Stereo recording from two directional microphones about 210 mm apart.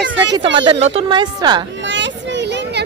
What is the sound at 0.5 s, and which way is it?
A woman's voice, 25° right (ahead or behind).